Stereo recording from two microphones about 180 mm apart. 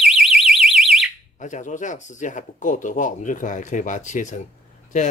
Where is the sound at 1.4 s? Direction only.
45° left (ahead or behind).